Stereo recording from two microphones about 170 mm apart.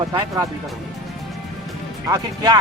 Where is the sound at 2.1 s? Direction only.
20° right (ahead or behind).